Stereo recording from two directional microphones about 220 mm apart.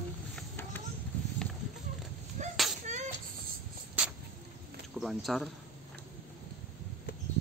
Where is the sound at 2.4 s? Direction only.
35° right (ahead or behind).